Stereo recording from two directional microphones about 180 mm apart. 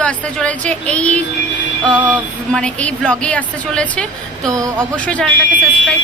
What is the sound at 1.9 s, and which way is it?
Music, 10° right (ahead or behind).